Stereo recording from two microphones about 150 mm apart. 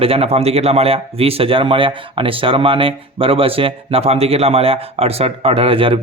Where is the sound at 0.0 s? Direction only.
40° right (ahead or behind).